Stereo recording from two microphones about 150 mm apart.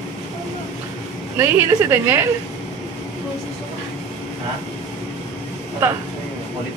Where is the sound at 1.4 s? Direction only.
15° right (ahead or behind).